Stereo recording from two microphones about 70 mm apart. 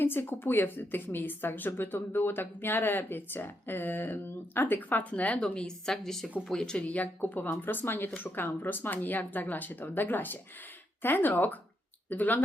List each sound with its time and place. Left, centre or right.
0.0 s speech: left